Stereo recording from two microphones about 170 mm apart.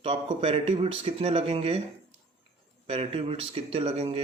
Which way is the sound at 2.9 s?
35° right (ahead or behind).